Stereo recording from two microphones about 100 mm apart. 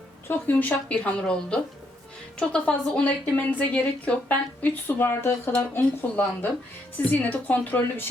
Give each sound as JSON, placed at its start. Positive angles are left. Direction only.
{"t": 0.3, "sound": "a woman's voice", "side_deg": 15}